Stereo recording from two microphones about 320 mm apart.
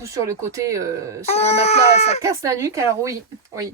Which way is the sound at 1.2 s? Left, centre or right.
Centre.